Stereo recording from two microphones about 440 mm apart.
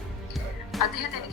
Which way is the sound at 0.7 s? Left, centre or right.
Centre.